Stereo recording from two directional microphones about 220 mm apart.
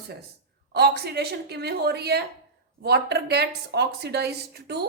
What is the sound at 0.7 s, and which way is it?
Speech, 50° right (ahead or behind).